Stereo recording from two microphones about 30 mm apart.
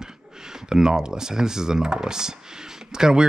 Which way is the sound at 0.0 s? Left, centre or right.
Right.